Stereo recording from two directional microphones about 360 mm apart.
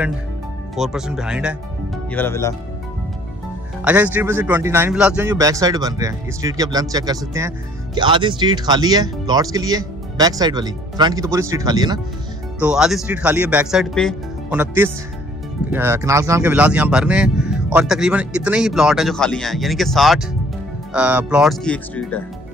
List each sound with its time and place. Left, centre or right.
0.7 s speech: centre
3.8 s a man's voice: centre